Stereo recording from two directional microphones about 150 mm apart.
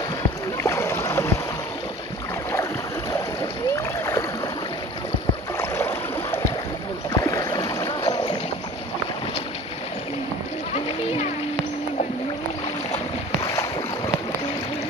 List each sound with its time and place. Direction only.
0.2 s boat: 20° left (ahead or behind)
3.7 s rowboat: 20° left (ahead or behind)
5.6 s boat: 15° left (ahead or behind)
7.1 s boat: 25° left (ahead or behind)
13.5 s boat: 25° left (ahead or behind)